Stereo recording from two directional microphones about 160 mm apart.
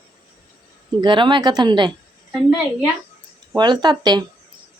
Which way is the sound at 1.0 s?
30° right (ahead or behind).